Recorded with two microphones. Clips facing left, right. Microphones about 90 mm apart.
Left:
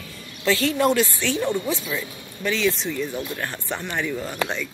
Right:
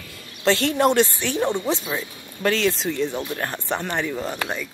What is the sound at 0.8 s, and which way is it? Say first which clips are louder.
Speech: right 3 dB; 25° right (ahead or behind).